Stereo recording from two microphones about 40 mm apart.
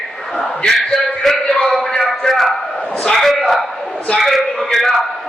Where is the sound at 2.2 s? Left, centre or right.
Centre.